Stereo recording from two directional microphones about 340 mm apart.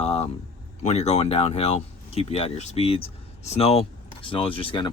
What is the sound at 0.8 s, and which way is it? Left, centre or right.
Speech, centre.